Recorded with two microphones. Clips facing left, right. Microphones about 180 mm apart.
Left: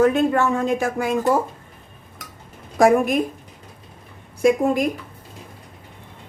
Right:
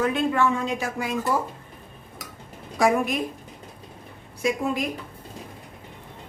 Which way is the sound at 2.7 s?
50° left (ahead or behind).